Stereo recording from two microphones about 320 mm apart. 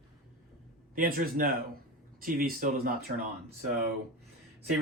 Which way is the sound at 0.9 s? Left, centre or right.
Right.